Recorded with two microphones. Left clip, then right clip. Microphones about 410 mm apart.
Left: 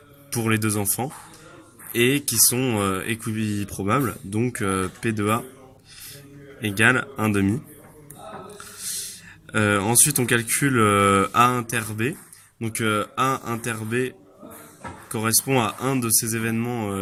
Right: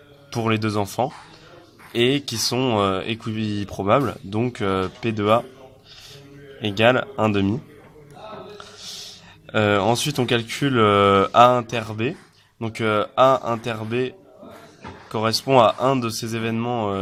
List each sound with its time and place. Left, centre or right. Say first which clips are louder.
0.3 s speech: right 1 dB; centre
2.0 s speech: left 1 dB; centre
6.6 s speech: right 2 dB; centre
9.5 s speech: right 3 dB; centre
15.1 s speech: right 5 dB; centre